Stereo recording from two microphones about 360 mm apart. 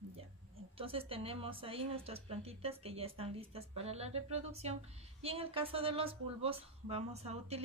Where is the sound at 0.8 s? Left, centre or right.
Centre.